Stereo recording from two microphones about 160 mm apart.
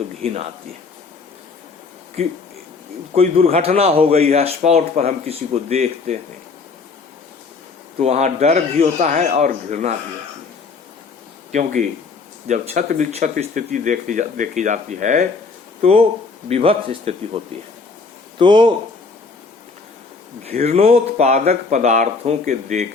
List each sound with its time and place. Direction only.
0.2 s speech: 35° right (ahead or behind)
2.2 s speech: 40° right (ahead or behind)
8.0 s speech: 45° right (ahead or behind)
11.5 s speech: 55° right (ahead or behind)
15.8 s speech: 40° right (ahead or behind)
18.3 s speech: 30° right (ahead or behind)
20.5 s speech: 40° right (ahead or behind)